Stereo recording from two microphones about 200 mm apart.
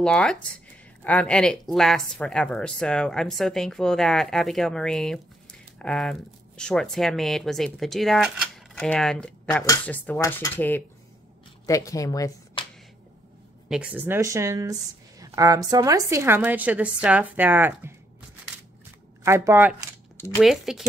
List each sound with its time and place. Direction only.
0.0 s speech: 5° left (ahead or behind)
13.7 s speech: 5° right (ahead or behind)
19.2 s speech: 15° right (ahead or behind)